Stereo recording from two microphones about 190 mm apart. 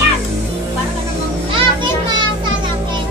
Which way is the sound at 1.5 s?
25° right (ahead or behind).